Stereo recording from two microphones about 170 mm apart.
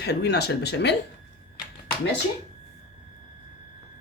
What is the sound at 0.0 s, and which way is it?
Speech, 75° left (ahead or behind).